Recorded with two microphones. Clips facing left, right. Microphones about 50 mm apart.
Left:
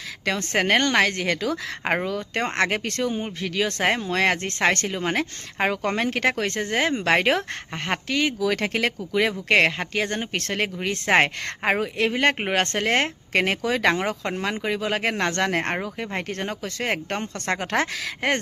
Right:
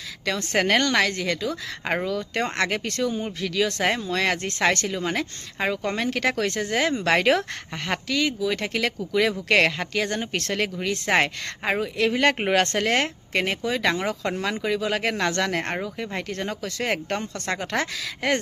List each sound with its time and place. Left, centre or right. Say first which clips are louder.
0.5 s speech: left 1 dB; left
1.1 s speech: left 2 dB; left
2.0 s speech: even; left
8.4 s speech: left 2 dB; left
8.7 s speech: left 1 dB; left
9.5 s speech: left 1 dB; left
12.1 s speech: right 2 dB; centre
13.3 s speech: left 3 dB; left
13.8 s speech: left 2 dB; left
14.3 s speech: even; centre
14.5 s speech: even; left